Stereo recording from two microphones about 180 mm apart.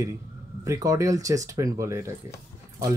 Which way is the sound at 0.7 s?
15° right (ahead or behind).